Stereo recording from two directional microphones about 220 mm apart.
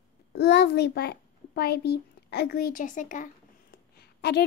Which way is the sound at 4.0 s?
45° left (ahead or behind).